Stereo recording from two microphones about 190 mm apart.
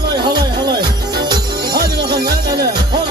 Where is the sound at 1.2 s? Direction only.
20° right (ahead or behind).